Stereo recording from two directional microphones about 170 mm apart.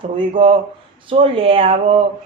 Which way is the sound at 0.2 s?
30° right (ahead or behind).